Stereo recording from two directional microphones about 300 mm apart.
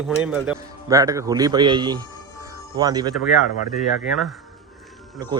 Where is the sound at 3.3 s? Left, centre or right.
Left.